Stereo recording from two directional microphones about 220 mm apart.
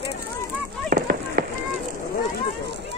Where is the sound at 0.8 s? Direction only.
40° right (ahead or behind).